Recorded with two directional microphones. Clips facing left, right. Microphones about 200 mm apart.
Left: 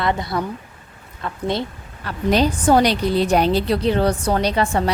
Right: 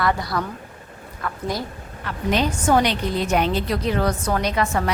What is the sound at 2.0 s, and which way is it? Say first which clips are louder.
A woman's voice: left 4 dB; 35° left (ahead or behind).